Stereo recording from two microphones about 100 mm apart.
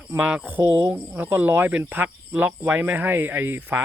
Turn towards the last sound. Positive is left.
turn(degrees=-20)  # may be behind; listen again after turning